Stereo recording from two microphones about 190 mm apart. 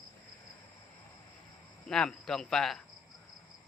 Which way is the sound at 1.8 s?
5° left (ahead or behind).